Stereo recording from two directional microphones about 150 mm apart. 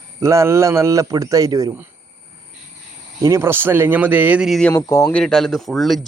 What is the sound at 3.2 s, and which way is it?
Speech, 20° right (ahead or behind).